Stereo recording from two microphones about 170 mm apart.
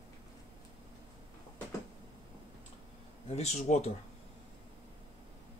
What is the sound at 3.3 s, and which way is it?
Speech, 40° left (ahead or behind).